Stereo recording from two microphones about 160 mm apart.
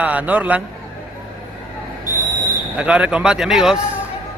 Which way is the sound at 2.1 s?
55° right (ahead or behind).